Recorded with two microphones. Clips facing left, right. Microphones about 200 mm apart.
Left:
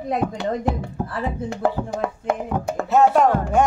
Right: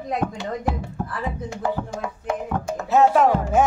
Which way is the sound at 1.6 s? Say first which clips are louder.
Left 4 dB; 60° left (ahead or behind).